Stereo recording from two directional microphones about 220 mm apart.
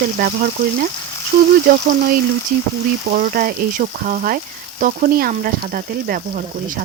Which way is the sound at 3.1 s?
40° right (ahead or behind).